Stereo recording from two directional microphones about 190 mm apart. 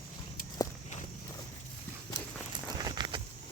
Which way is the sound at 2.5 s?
20° right (ahead or behind).